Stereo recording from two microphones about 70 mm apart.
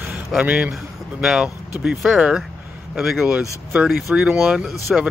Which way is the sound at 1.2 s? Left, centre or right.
Centre.